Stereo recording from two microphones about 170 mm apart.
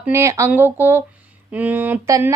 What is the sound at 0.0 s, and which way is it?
Speech, 15° right (ahead or behind).